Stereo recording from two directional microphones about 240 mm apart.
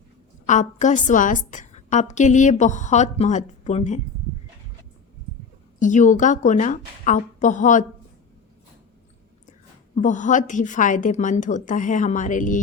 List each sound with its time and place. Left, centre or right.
0.4 s a woman's voice: left
5.8 s a woman's voice: left
9.9 s a woman's voice: left